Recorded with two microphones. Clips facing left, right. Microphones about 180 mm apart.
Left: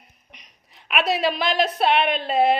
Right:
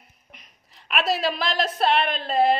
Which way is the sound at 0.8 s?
Centre (ahead or behind).